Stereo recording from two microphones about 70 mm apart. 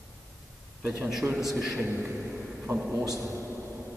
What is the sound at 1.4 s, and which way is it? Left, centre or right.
Speech, centre.